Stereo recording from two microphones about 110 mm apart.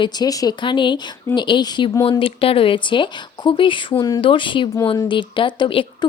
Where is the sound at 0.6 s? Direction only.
45° left (ahead or behind).